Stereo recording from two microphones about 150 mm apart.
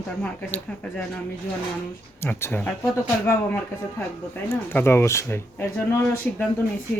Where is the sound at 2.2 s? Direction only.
15° left (ahead or behind).